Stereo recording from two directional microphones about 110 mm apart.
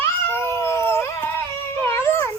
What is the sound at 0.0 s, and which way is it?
Cat, 20° left (ahead or behind).